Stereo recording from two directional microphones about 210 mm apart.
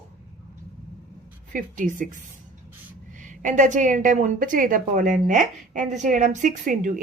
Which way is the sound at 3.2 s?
35° right (ahead or behind).